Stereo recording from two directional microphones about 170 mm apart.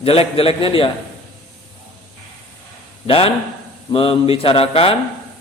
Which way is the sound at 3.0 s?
35° left (ahead or behind).